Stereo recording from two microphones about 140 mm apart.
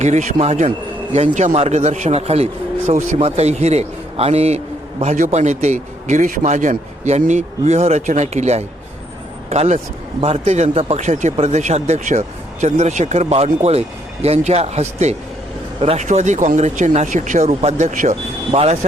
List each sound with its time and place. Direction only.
0.0 s a man's voice: 55° right (ahead or behind)
16.0 s a man's voice: 60° right (ahead or behind)
17.5 s speech: 45° right (ahead or behind)
18.5 s speech: 50° right (ahead or behind)